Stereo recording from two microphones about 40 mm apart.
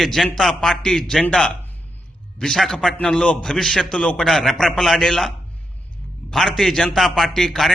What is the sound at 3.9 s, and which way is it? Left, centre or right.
Speech, left.